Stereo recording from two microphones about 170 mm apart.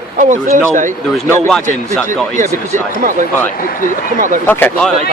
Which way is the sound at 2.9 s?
50° right (ahead or behind).